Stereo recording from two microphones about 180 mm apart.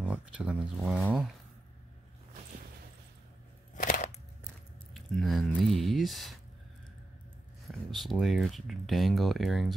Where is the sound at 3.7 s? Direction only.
50° left (ahead or behind).